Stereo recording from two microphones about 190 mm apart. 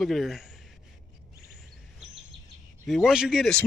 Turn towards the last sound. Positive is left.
turn(degrees=0)  # may be behind; listen again after turning